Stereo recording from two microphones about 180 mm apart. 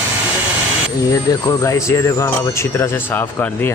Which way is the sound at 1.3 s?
20° left (ahead or behind).